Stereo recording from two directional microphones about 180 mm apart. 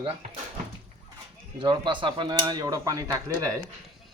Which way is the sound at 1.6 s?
25° right (ahead or behind).